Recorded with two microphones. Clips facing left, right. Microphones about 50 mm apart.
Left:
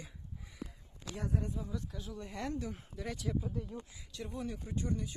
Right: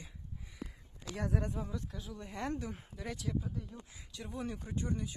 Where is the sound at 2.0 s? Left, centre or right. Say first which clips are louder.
Even; centre.